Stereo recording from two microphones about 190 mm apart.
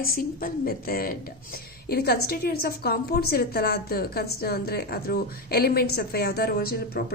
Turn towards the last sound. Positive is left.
turn(degrees=55)  # may be behind; listen again after turning